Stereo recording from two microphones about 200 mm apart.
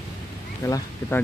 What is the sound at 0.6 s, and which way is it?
Speech, 15° left (ahead or behind).